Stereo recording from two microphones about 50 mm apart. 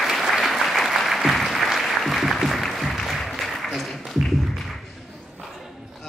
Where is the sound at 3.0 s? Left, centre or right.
Centre.